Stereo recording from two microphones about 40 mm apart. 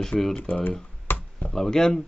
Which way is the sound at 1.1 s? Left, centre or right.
Left.